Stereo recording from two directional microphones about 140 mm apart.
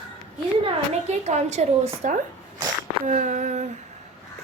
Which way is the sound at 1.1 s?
55° right (ahead or behind).